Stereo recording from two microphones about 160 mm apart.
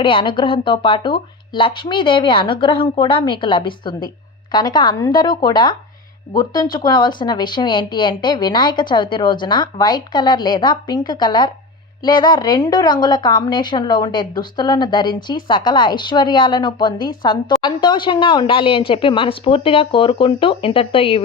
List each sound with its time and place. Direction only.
0.0 s speech: 30° left (ahead or behind)